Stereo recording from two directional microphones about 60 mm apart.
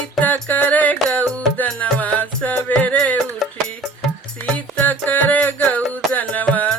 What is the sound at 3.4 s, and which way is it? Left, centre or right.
Music, centre.